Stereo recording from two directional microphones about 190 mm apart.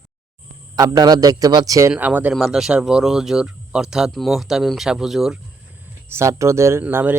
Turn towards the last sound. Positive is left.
turn(degrees=-10)  # may be behind; listen again after turning